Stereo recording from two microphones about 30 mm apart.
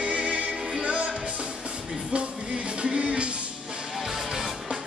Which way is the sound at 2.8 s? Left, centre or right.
Right.